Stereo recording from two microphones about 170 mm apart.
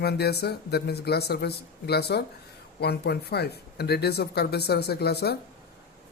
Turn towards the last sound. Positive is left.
turn(degrees=70)  # may be behind; listen again after turning